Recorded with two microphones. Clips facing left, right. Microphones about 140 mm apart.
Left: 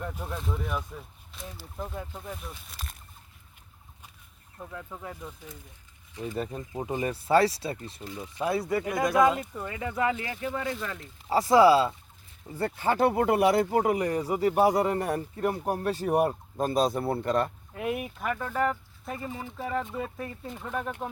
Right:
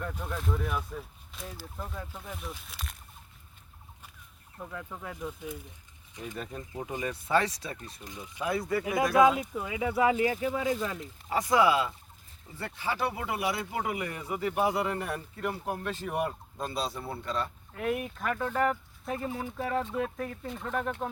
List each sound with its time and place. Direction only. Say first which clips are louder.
0.0 s speech: even; 5° left (ahead or behind)
1.9 s speech: left 3 dB; 20° left (ahead or behind)
2.2 s speech: left 1 dB; centre (ahead or behind)
4.7 s speech: left 1 dB; 5° left (ahead or behind)
6.1 s speech: left 6 dB; 25° left (ahead or behind)
8.8 s speech: right 1 dB; 5° right (ahead or behind)
11.3 s speech: left 6 dB; 30° left (ahead or behind)
12.5 s speech: left 7 dB; 45° left (ahead or behind)
17.7 s speech: even; 10° left (ahead or behind)